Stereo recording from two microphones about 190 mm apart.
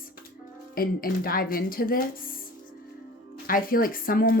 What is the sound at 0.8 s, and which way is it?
Speech, 50° left (ahead or behind).